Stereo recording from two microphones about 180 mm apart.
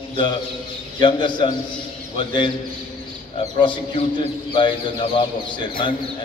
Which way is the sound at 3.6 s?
25° left (ahead or behind).